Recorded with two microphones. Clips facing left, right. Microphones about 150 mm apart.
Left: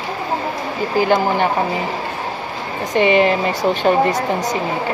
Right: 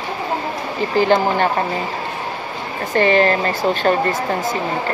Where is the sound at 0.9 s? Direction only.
10° left (ahead or behind).